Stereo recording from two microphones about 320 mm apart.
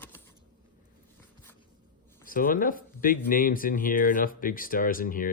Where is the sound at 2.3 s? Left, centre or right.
Left.